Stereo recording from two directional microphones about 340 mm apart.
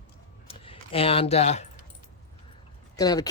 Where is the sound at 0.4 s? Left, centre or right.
Centre.